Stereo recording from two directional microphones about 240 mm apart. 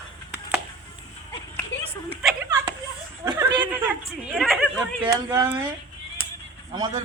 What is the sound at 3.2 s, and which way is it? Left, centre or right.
A woman's voice, centre.